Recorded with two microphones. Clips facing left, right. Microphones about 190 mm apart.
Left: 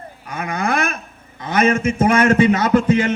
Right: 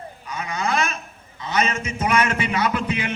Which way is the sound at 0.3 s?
55° left (ahead or behind).